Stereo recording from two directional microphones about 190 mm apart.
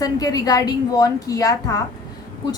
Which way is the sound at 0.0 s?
20° left (ahead or behind).